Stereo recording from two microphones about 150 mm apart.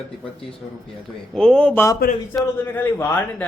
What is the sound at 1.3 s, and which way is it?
A man's voice, 5° left (ahead or behind).